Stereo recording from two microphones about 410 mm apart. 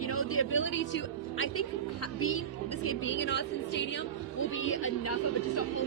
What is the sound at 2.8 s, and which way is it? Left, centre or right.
Speech, left.